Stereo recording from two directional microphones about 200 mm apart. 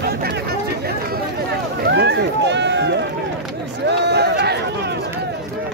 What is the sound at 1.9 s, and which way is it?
Run, 55° right (ahead or behind).